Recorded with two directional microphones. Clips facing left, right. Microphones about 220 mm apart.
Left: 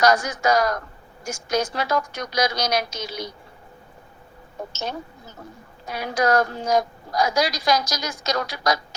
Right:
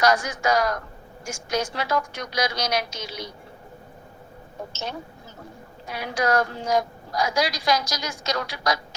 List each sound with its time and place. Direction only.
0.0 s a woman's voice: 40° left (ahead or behind)
5.9 s a woman's voice: 40° left (ahead or behind)